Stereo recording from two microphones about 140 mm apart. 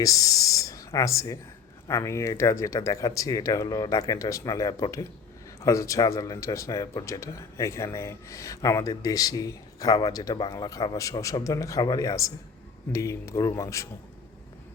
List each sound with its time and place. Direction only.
0.0 s speech: 25° left (ahead or behind)